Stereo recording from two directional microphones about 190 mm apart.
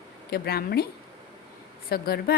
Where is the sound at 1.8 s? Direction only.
55° left (ahead or behind).